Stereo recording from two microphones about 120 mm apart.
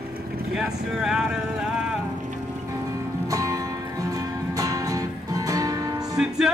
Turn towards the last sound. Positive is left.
turn(degrees=-5)  # may be behind; listen again after turning